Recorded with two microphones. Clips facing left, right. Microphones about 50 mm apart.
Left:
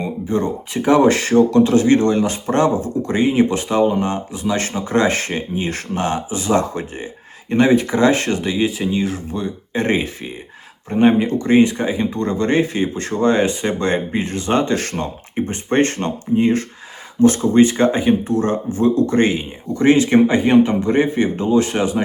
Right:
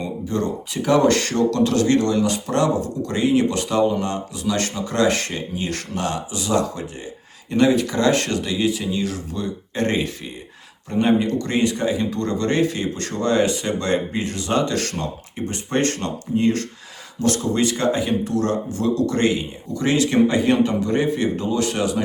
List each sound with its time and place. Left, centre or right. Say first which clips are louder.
0.0 s speech: left 4 dB; left